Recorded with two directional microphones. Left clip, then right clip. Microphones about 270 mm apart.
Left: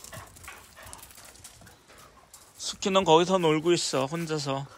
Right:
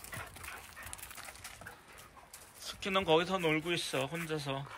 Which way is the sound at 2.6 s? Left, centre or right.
Centre.